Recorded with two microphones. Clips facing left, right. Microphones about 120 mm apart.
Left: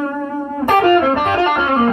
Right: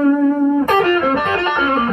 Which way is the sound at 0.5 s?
15° left (ahead or behind).